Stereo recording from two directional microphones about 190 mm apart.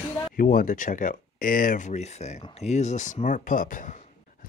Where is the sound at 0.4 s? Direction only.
50° left (ahead or behind).